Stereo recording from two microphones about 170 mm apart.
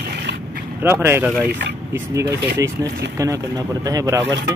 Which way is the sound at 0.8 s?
15° right (ahead or behind).